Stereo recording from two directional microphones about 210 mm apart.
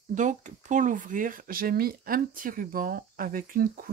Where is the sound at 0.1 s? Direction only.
35° right (ahead or behind).